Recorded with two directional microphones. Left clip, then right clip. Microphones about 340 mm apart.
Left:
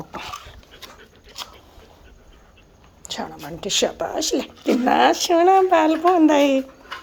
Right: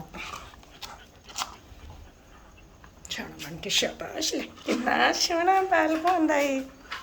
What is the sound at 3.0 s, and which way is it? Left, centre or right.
Speech, centre.